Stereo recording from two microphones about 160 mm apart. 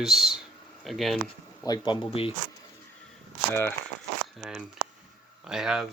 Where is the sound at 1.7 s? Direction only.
30° left (ahead or behind).